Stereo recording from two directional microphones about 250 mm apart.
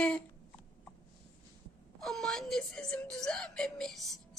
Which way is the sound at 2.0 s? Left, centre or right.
Centre.